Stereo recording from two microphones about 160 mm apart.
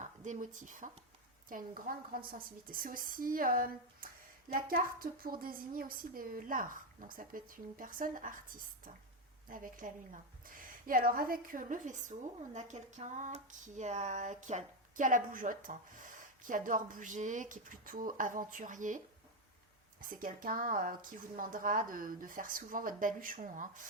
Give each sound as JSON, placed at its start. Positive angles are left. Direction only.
{"t": 0.0, "sound": "a woman's voice", "side_deg": -50}
{"t": 9.5, "sound": "a woman's voice", "side_deg": -55}